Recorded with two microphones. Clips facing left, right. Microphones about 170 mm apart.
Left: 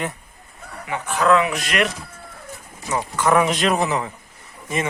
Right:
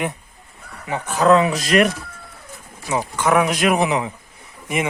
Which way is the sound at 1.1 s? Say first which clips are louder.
Right 3 dB; 35° right (ahead or behind).